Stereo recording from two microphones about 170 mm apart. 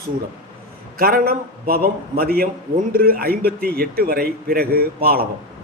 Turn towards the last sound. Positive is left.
turn(degrees=-65)  # may be behind; listen again after turning